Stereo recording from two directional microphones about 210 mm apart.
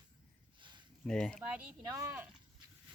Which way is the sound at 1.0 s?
5° left (ahead or behind).